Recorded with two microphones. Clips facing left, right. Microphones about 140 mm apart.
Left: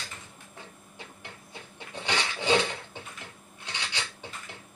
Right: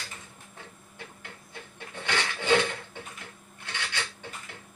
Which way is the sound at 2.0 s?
15° left (ahead or behind).